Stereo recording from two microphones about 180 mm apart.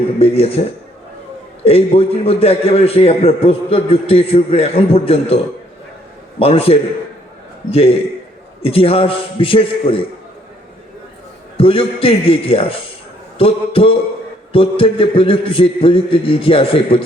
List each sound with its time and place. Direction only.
0.2 s a man's voice: 35° left (ahead or behind)
1.6 s a man's voice: 35° left (ahead or behind)
6.4 s a man's voice: 35° left (ahead or behind)
11.5 s a man's voice: 30° left (ahead or behind)